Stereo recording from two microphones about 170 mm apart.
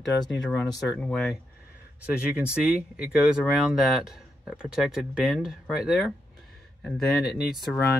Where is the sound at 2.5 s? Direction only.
5° right (ahead or behind).